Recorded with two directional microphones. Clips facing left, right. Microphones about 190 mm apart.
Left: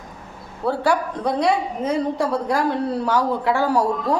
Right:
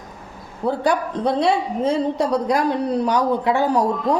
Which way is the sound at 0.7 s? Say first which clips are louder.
Even; 20° right (ahead or behind).